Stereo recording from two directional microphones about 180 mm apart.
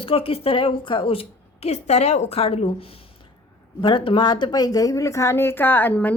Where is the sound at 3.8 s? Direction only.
25° left (ahead or behind).